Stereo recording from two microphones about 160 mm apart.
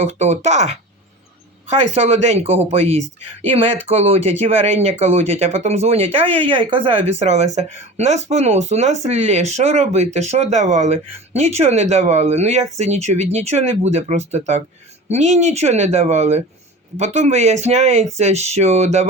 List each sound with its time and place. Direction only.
0.0 s speech: 45° right (ahead or behind)